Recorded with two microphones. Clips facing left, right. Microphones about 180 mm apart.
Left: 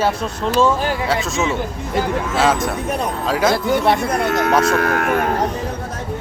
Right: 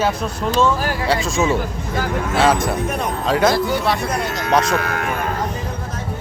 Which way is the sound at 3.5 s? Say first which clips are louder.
Left 2 dB; 50° left (ahead or behind).